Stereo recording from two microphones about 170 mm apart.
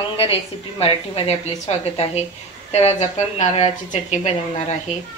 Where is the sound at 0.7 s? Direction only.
35° left (ahead or behind).